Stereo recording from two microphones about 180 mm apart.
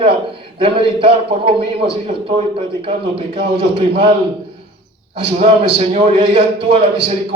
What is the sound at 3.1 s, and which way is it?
Speech, 30° right (ahead or behind).